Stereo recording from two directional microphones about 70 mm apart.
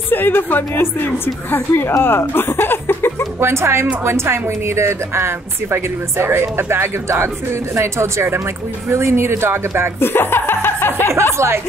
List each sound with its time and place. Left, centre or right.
0.1 s a woman's voice: left
3.3 s speech: right
9.9 s chuckle: left
11.3 s speech: right